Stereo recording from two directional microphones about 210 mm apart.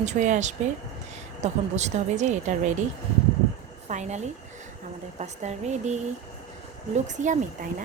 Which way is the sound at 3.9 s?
35° right (ahead or behind).